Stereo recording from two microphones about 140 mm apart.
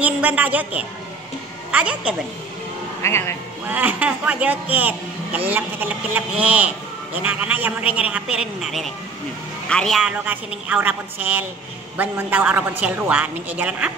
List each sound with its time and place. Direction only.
0.0 s a woman's voice: 10° right (ahead or behind)
3.0 s a man's voice: 20° left (ahead or behind)
3.6 s a man's voice: 10° right (ahead or behind)
10.2 s speech: 10° right (ahead or behind)